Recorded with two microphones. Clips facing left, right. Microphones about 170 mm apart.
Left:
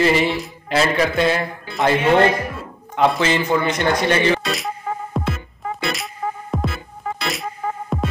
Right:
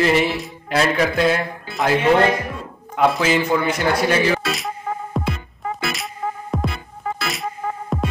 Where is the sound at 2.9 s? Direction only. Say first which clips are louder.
Even; 5° right (ahead or behind).